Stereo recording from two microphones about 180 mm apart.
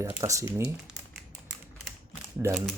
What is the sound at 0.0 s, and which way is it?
Speech, 15° right (ahead or behind).